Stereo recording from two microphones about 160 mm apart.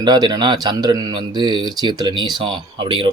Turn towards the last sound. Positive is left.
turn(degrees=-30)  # may be behind; listen again after turning